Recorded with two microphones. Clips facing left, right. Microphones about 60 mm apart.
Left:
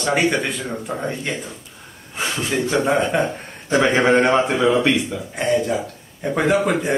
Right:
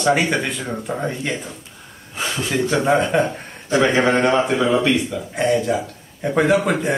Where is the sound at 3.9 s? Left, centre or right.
Centre.